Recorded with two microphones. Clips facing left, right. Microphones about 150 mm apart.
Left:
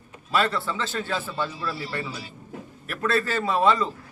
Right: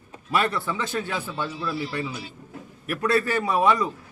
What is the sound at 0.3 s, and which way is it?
A man's voice, 15° right (ahead or behind).